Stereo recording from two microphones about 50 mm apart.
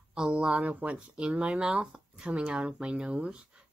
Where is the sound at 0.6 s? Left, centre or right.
Right.